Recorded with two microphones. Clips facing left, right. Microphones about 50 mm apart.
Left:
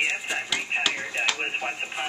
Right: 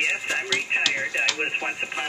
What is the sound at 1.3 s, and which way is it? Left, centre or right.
Speech, centre.